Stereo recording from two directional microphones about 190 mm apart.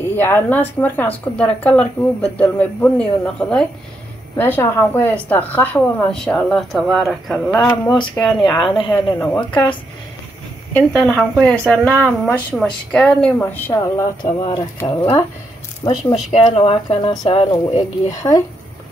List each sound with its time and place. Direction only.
0.1 s speech: 10° left (ahead or behind)
7.8 s speech: 20° left (ahead or behind)
9.3 s speech: 10° left (ahead or behind)
10.8 s speech: centre (ahead or behind); by 18.1 s 30° left (ahead or behind)
18.1 s speech: 20° left (ahead or behind)